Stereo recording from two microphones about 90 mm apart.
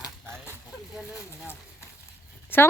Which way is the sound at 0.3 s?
25° right (ahead or behind).